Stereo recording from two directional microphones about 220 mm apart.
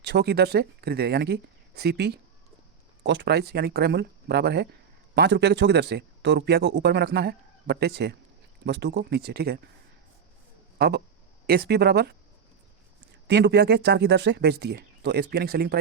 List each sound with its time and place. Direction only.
0.0 s speech: 50° right (ahead or behind)
10.8 s speech: 50° right (ahead or behind)
13.2 s speech: 50° right (ahead or behind)